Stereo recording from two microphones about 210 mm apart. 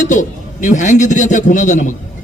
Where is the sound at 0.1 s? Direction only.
35° left (ahead or behind).